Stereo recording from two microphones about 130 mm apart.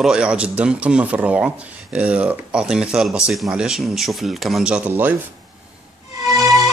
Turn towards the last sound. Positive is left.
turn(degrees=-25)  # may be behind; listen again after turning